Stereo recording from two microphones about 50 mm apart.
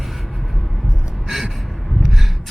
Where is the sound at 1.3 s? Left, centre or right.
Centre.